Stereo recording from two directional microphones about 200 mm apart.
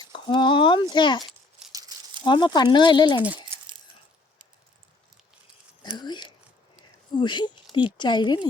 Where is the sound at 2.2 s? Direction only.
25° left (ahead or behind).